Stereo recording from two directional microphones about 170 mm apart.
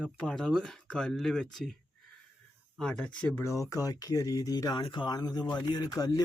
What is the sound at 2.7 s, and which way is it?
Speech, 5° left (ahead or behind).